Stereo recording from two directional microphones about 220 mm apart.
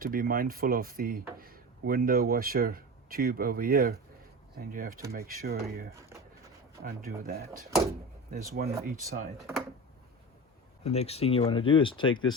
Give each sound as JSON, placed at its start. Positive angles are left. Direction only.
{"t": 0.0, "sound": "speech", "side_deg": -40}
{"t": 6.0, "sound": "drawer open or close", "side_deg": -10}
{"t": 6.8, "sound": "speech", "side_deg": -40}
{"t": 9.4, "sound": "speech", "side_deg": 0}
{"t": 10.8, "sound": "speech", "side_deg": 30}